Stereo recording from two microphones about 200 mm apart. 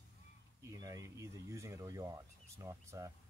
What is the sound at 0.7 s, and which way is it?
Speech, 15° right (ahead or behind).